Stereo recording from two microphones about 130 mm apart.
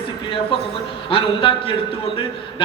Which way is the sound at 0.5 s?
40° left (ahead or behind).